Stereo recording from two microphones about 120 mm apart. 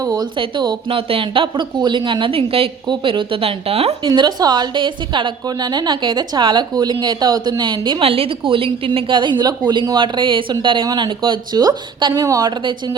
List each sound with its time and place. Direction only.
0.2 s speech: 40° right (ahead or behind)
4.0 s a woman's voice: 35° right (ahead or behind)
8.0 s a woman's voice: 50° right (ahead or behind)